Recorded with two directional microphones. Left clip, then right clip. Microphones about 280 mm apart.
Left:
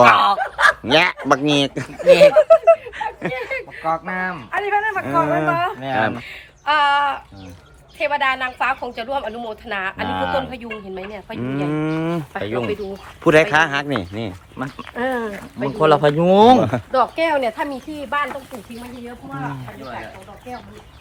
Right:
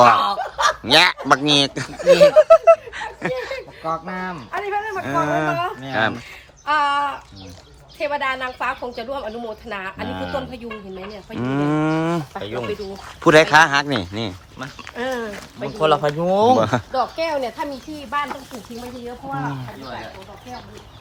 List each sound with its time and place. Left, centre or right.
0.0 s honk: centre
0.9 s a woman's voice: centre
12.3 s speech: left
13.2 s a woman's voice: centre
14.6 s speech: left
16.6 s a woman's voice: centre
17.2 s speech: centre